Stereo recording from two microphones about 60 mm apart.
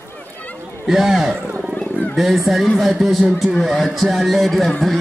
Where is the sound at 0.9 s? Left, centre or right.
Centre.